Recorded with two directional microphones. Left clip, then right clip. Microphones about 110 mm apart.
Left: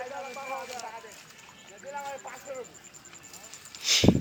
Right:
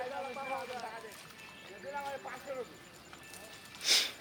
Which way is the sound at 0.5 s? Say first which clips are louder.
Left 3 dB; 5° left (ahead or behind).